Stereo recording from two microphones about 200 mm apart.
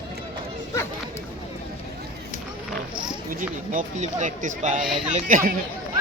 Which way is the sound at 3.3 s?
40° right (ahead or behind).